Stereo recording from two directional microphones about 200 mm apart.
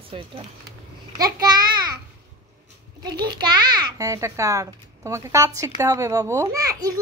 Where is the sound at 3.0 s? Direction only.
20° right (ahead or behind).